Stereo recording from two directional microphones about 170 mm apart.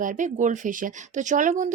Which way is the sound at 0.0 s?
50° right (ahead or behind).